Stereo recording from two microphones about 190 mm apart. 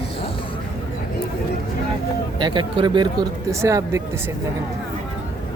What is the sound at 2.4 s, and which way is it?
Speech, 25° right (ahead or behind).